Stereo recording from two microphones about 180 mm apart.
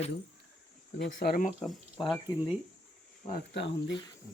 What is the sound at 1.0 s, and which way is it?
Speech, 55° left (ahead or behind).